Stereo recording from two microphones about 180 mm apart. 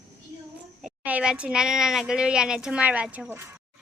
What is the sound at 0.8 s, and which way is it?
A child's voice, 5° right (ahead or behind).